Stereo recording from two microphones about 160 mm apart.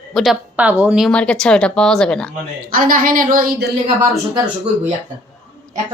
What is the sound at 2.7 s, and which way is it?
Speech, 60° right (ahead or behind).